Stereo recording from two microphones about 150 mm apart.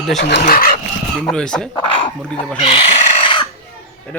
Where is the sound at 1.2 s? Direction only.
5° left (ahead or behind).